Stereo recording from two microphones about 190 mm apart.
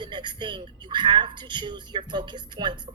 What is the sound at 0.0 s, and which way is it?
Speech, 25° right (ahead or behind).